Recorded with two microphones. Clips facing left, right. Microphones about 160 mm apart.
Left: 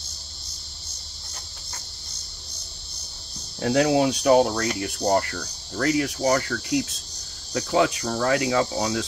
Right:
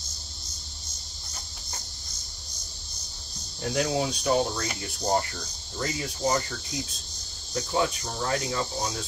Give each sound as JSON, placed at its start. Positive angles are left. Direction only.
{"t": 3.6, "sound": "speech", "side_deg": 65}